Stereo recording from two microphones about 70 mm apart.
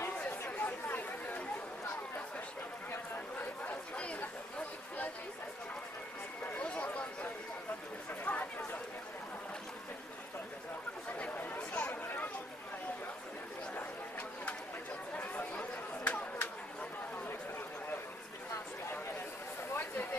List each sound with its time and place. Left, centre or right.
0.2 s chatter: left
3.6 s chatter: centre
6.5 s a sound: centre
11.1 s chatter: centre
15.1 s chatter: centre
19.7 s a sound: left